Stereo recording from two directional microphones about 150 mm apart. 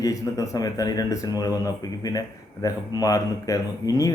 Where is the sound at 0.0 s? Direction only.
20° left (ahead or behind).